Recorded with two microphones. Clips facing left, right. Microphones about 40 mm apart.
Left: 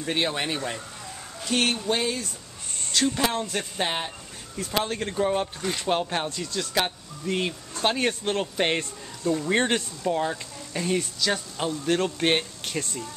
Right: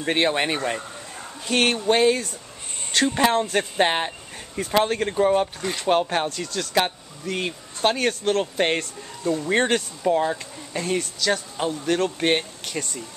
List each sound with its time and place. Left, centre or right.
0.0 s speech: right; by 6.2 s centre
6.2 s speech: centre